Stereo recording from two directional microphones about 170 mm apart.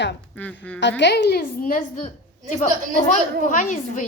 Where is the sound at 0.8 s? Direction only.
90° left; by 2.1 s 55° left (ahead or behind).